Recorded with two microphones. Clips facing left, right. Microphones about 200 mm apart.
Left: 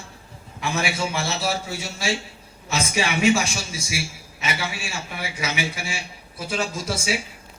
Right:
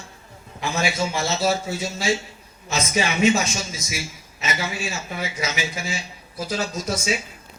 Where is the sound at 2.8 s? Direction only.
30° left (ahead or behind).